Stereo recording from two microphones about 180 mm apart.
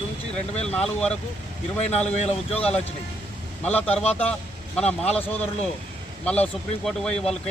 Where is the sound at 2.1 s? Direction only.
35° left (ahead or behind).